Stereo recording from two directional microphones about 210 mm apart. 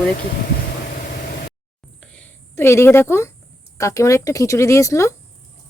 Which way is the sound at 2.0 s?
5° left (ahead or behind).